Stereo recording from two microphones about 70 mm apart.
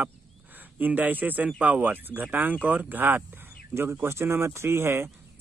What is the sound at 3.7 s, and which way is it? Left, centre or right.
Speech, right.